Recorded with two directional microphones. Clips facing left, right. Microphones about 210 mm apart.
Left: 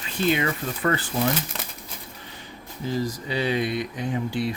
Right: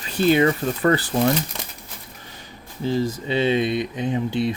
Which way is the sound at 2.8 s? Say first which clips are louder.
Right 5 dB; 25° right (ahead or behind).